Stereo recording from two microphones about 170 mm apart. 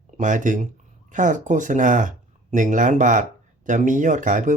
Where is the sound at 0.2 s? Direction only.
50° right (ahead or behind).